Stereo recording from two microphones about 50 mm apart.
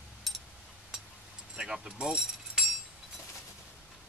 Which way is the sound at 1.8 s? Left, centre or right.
Centre.